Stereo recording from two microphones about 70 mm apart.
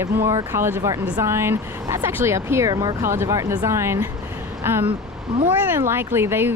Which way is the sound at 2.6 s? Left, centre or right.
Right.